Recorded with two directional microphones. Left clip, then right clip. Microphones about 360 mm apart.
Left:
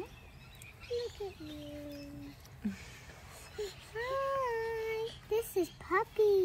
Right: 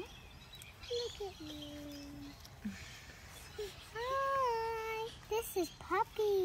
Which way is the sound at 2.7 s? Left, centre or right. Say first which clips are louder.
Left 1 dB; centre.